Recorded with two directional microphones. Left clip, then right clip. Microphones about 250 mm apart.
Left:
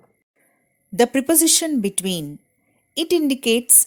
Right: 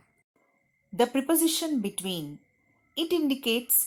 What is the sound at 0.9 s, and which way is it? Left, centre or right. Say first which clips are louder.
Speech: left 7 dB; left.